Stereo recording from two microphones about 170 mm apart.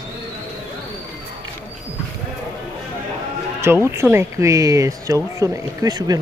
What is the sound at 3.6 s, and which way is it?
Speech, 15° right (ahead or behind).